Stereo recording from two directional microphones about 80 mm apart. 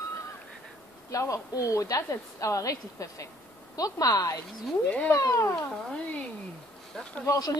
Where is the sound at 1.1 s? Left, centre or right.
Left.